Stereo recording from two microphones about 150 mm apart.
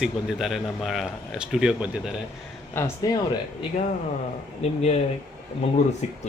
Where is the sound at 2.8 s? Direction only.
20° left (ahead or behind).